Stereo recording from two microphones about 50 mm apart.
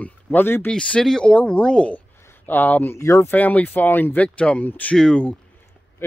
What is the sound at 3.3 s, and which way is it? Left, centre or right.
Speech, left.